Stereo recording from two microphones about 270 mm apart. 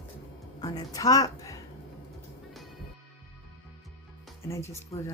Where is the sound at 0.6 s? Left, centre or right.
Centre.